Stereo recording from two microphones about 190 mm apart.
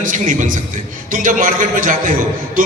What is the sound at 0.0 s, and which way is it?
A man's voice, 45° right (ahead or behind).